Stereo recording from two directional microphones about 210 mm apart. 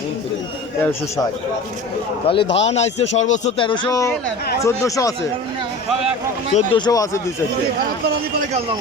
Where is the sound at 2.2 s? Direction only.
25° left (ahead or behind).